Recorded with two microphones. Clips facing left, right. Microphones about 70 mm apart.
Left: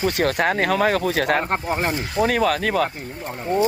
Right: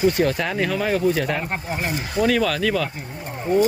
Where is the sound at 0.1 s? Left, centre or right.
Left.